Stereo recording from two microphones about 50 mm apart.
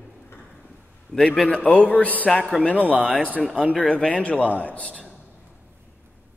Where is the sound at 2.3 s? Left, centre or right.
Centre.